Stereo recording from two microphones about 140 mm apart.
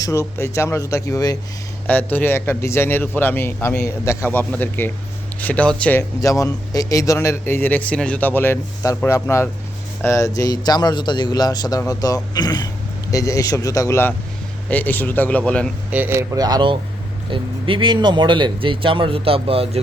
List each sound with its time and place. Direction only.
0.0 s a man's voice: 20° left (ahead or behind)
1.9 s a man's voice: 15° left (ahead or behind)
6.0 s a man's voice: 25° left (ahead or behind); by 15.7 s 10° left (ahead or behind)
15.9 s speech: 15° right (ahead or behind); by 19.8 s 40° right (ahead or behind)